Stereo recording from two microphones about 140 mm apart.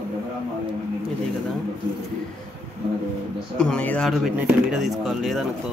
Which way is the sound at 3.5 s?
5° left (ahead or behind).